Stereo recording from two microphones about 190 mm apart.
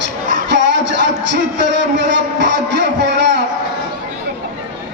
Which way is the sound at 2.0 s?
65° right (ahead or behind).